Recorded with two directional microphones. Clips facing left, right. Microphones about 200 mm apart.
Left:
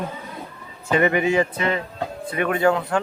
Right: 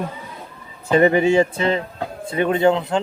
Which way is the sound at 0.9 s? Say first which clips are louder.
Right 4 dB; 30° right (ahead or behind).